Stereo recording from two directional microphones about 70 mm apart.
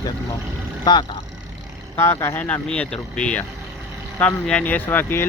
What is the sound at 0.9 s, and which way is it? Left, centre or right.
Speech, left.